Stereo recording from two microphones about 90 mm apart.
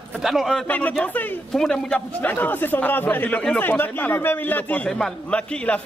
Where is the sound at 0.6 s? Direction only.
15° left (ahead or behind).